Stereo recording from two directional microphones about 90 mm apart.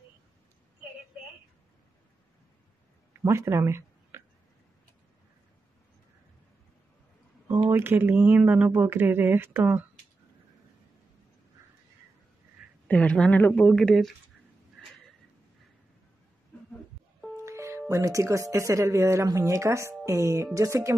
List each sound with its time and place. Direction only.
3.1 s a sound: 30° right (ahead or behind)
7.7 s speech: 25° right (ahead or behind)
12.8 s speech: 15° left (ahead or behind)
17.4 s speech: 35° right (ahead or behind)
20.1 s music: 35° right (ahead or behind)